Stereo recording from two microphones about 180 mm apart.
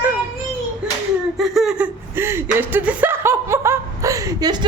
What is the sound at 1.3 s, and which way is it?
Speech, centre (ahead or behind).